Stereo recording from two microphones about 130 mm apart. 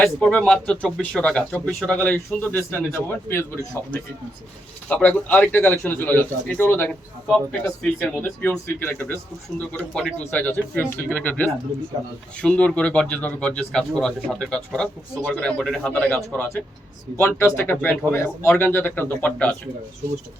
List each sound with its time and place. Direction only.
0.0 s a man's voice: 10° left (ahead or behind)
17.2 s a man's voice: 20° left (ahead or behind)